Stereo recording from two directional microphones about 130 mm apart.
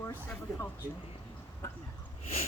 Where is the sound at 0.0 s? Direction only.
15° left (ahead or behind).